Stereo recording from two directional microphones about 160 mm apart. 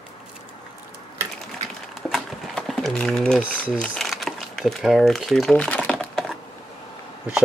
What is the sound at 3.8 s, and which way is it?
Crumpling, centre (ahead or behind).